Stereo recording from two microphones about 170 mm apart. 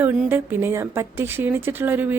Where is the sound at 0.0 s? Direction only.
15° right (ahead or behind).